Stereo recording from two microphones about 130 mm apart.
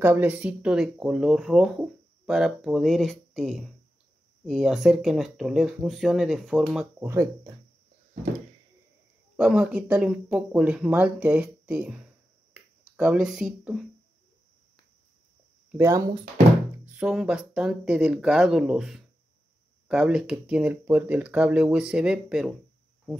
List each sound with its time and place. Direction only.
0.0 s speech: 15° right (ahead or behind)
7.0 s speech: 20° right (ahead or behind)
9.4 s speech: 5° right (ahead or behind)
15.8 s speech: 25° right (ahead or behind)
16.7 s speech: 15° right (ahead or behind)